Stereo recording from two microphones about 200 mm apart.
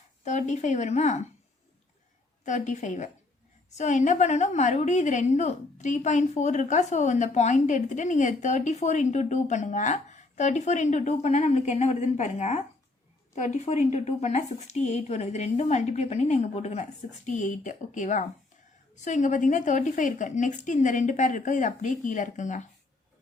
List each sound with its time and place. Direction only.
0.3 s a woman's voice: 35° left (ahead or behind)
2.4 s a woman's voice: 40° left (ahead or behind)